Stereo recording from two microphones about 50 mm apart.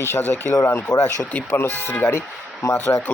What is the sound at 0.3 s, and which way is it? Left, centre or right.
Speech, left.